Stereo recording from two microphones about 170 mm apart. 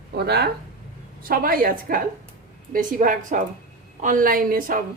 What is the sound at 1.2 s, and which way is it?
A woman's voice, 60° right (ahead or behind).